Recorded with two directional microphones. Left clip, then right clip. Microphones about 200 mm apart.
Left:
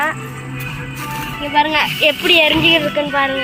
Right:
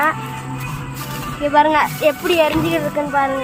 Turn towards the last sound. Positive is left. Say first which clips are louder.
# left 1 dB
turn(degrees=5)  # may be behind; listen again after turning